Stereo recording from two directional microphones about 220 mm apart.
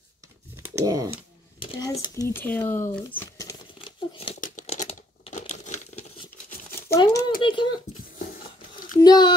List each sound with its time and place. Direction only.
0.6 s speech: 10° right (ahead or behind)
1.6 s a sound: 20° left (ahead or behind)
2.3 s crumpling: 10° left (ahead or behind)
4.4 s crumpling: 35° left (ahead or behind)
7.0 s a child's voice: 15° left (ahead or behind)
8.2 s a sound: 40° left (ahead or behind)
9.0 s speech: 20° left (ahead or behind)